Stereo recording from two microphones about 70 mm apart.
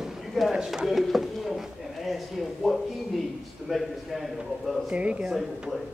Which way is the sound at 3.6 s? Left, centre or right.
Centre.